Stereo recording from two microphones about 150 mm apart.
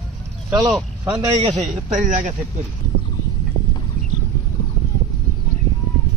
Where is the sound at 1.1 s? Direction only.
40° right (ahead or behind).